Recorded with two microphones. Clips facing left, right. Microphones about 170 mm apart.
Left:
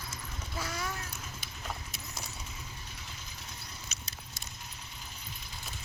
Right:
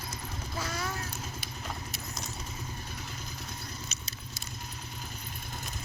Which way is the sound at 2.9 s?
50° right (ahead or behind).